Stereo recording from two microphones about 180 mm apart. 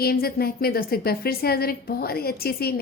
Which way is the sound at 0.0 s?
60° left (ahead or behind).